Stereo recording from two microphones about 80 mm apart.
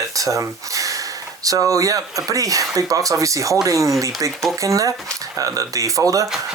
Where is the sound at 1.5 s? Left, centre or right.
Right.